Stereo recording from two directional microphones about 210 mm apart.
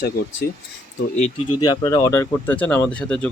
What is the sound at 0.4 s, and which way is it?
Speech, 50° left (ahead or behind).